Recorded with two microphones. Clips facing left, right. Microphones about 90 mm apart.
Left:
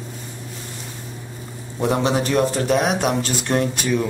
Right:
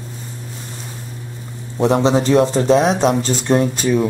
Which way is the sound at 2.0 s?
25° right (ahead or behind).